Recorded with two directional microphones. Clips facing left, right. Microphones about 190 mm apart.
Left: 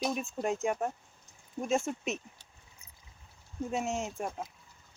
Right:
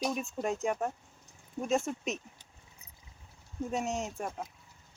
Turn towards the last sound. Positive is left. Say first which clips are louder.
# left 1 dB
turn(degrees=0)  # may be behind; listen again after turning